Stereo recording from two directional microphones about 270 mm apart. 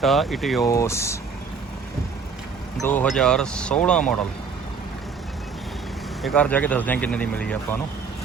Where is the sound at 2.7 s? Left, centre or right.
Centre.